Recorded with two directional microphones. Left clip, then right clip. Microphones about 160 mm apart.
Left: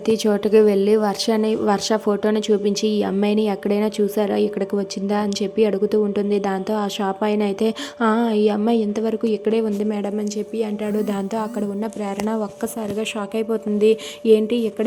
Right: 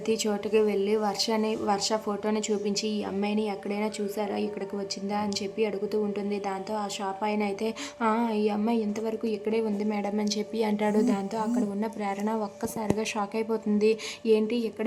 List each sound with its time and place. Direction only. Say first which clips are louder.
0.1 s a woman's voice: left 10 dB; 30° left (ahead or behind)
10.2 s a woman's voice: left 5 dB; 15° left (ahead or behind)
11.0 s speech: left 4 dB; 30° left (ahead or behind)
13.3 s speech: left 6 dB; 20° left (ahead or behind)